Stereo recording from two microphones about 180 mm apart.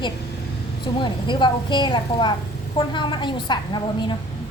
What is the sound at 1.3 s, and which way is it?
A woman's voice, 25° left (ahead or behind).